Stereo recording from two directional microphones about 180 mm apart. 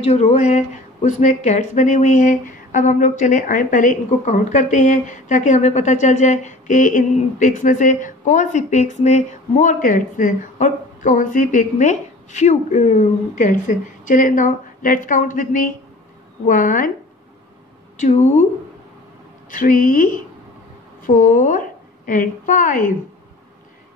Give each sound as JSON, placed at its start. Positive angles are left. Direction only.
{"t": 0.0, "sound": "speech", "side_deg": 40}
{"t": 18.0, "sound": "a woman's voice", "side_deg": 40}
{"t": 19.5, "sound": "a woman's voice", "side_deg": 50}